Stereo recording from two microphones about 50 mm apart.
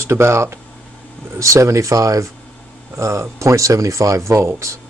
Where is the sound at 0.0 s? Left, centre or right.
Right.